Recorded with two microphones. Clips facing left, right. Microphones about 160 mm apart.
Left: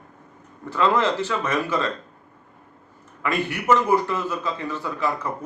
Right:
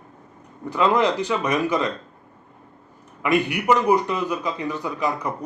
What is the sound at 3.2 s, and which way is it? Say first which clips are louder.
Speech: right 4 dB; 15° right (ahead or behind).